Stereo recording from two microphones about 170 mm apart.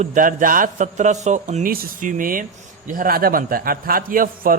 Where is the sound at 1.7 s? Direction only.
55° right (ahead or behind).